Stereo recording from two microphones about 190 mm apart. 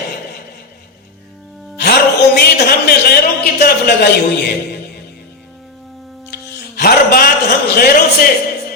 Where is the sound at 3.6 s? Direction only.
60° left (ahead or behind).